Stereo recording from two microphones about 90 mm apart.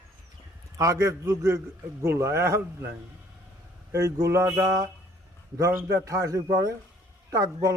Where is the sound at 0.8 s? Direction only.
35° right (ahead or behind).